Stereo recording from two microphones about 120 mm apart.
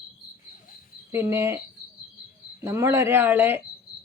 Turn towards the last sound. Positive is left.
turn(degrees=-15)  # may be behind; listen again after turning